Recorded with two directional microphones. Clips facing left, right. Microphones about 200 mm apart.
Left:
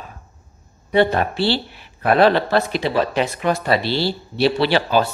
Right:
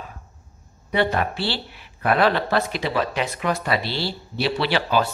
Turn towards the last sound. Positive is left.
turn(degrees=30)  # may be behind; listen again after turning